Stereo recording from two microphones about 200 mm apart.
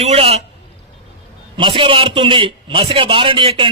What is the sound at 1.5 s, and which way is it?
Speech, 25° right (ahead or behind).